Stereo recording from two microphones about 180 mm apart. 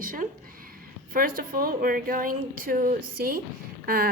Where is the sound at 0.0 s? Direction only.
50° right (ahead or behind).